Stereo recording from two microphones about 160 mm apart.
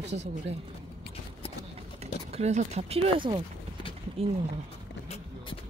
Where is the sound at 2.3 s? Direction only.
45° right (ahead or behind).